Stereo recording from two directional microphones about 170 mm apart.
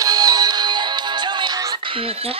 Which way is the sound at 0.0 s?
20° right (ahead or behind).